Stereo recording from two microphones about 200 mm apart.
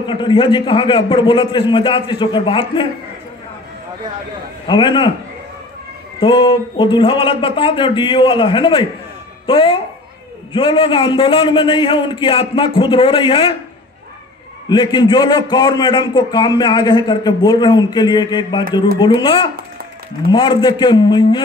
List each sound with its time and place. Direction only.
0.0 s a man's voice: 25° left (ahead or behind)
4.6 s a man's voice: 25° left (ahead or behind)
6.1 s a man's voice: 25° left (ahead or behind)
14.7 s a man's voice: 20° left (ahead or behind)